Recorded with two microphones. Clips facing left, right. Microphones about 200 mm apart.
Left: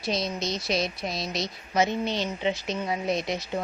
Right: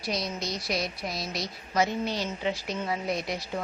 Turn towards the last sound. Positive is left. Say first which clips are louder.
# left 3 dB
turn(degrees=20)  # may be behind; listen again after turning